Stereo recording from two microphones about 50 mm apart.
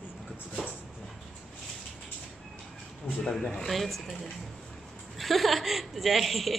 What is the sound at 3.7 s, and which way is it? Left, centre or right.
A woman's voice, centre.